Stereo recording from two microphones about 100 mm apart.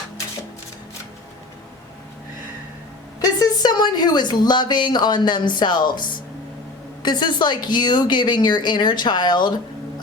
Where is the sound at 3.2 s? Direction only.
40° left (ahead or behind).